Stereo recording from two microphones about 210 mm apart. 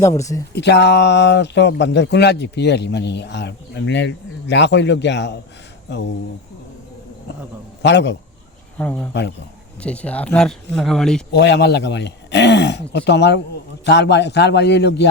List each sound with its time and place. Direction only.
0.0 s speech: 15° left (ahead or behind)
0.5 s speech: 55° left (ahead or behind)
7.8 s a man's voice: 55° left (ahead or behind)
8.8 s speech: 5° left (ahead or behind)
11.3 s speech: 55° left (ahead or behind)